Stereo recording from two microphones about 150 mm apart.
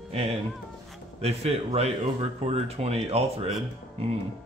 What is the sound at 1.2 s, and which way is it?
Speech, 45° right (ahead or behind).